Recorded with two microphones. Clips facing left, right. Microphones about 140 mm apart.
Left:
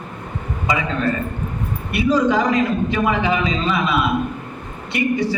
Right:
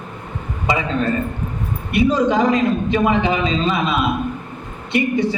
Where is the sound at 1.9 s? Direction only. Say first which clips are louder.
Right 1 dB; 20° right (ahead or behind).